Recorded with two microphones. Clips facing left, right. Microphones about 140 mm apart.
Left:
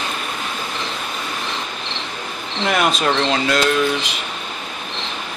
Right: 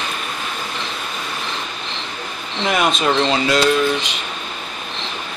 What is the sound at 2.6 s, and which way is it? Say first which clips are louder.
Speech: even; centre (ahead or behind).